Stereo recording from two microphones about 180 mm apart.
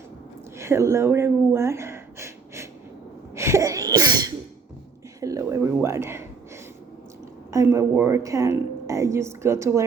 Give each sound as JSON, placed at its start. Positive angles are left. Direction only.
{"t": 0.6, "sound": "a sound", "side_deg": -15}
{"t": 3.3, "sound": "sneeze", "side_deg": -15}
{"t": 5.2, "sound": "speech", "side_deg": -15}
{"t": 7.5, "sound": "a woman's voice", "side_deg": -15}